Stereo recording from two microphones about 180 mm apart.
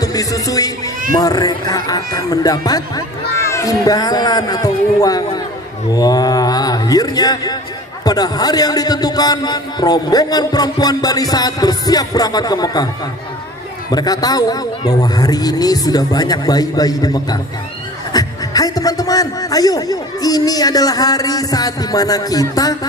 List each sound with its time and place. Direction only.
0.0 s a man's voice: 20° left (ahead or behind)
13.9 s a man's voice: 20° left (ahead or behind)